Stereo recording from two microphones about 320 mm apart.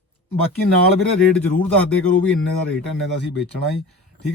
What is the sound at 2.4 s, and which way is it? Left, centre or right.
Speech, left.